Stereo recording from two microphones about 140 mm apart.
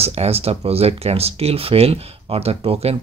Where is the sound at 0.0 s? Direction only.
45° right (ahead or behind).